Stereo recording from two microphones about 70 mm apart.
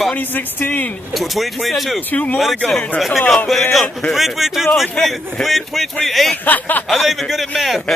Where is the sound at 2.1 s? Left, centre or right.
Left.